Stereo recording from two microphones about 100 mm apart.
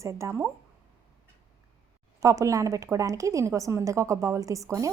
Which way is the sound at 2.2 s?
35° right (ahead or behind).